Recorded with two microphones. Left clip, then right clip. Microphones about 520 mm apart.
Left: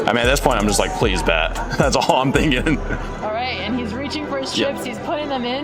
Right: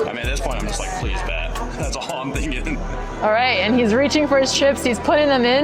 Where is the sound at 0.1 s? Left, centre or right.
Left.